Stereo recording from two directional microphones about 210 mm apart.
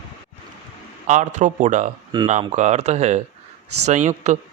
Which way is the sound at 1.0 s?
35° right (ahead or behind).